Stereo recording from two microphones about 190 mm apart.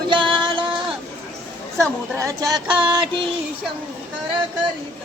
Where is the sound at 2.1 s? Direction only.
15° right (ahead or behind).